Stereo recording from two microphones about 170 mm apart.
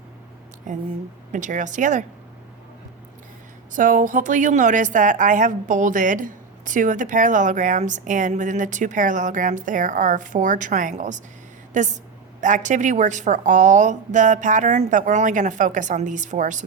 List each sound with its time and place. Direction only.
0.7 s a woman's voice: 45° right (ahead or behind)
3.7 s a woman's voice: 50° right (ahead or behind)